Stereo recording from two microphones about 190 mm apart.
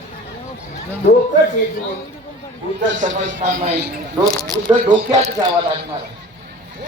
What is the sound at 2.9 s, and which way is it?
Speech, 80° right.